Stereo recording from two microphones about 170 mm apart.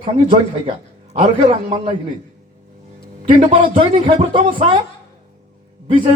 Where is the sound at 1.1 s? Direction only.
30° right (ahead or behind).